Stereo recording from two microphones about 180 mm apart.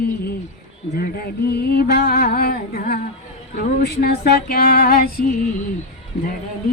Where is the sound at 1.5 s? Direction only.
60° left (ahead or behind).